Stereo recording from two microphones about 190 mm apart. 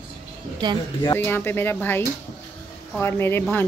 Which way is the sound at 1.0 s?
10° left (ahead or behind).